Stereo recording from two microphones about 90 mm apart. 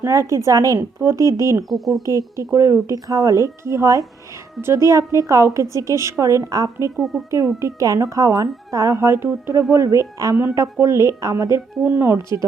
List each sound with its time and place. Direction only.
0.0 s speech: 35° right (ahead or behind)
1.7 s speech: centre (ahead or behind)
2.0 s speech: 35° right (ahead or behind)
6.9 s speech: centre (ahead or behind)
7.3 s speech: 35° right (ahead or behind)
11.8 s speech: 25° right (ahead or behind)